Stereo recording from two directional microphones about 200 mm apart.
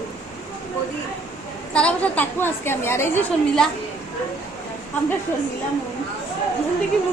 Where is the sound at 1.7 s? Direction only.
5° left (ahead or behind).